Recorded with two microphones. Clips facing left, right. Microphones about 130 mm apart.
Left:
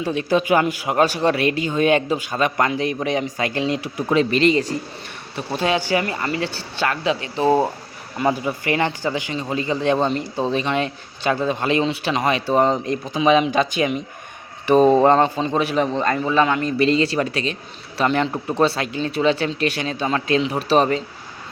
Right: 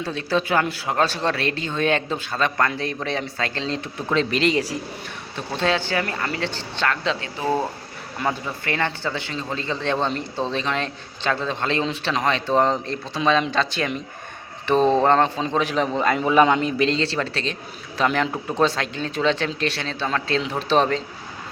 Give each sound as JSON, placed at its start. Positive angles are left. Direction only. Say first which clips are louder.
{"t": 0.0, "sound": "speech", "louder": "left 4 dB", "side_deg": 15}
{"t": 5.5, "sound": "speech", "louder": "left 2 dB", "side_deg": 10}
{"t": 7.3, "sound": "speech", "louder": "left 7 dB", "side_deg": 25}
{"t": 8.2, "sound": "speech", "louder": "left 5 dB", "side_deg": 10}
{"t": 16.1, "sound": "a man's voice", "louder": "right 4 dB", "side_deg": -15}
{"t": 16.7, "sound": "speech", "louder": "left 4 dB", "side_deg": 5}